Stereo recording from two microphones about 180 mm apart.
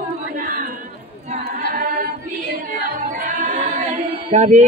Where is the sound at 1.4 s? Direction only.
55° right (ahead or behind).